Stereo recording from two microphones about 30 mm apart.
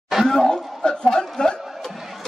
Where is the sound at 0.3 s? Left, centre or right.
Left.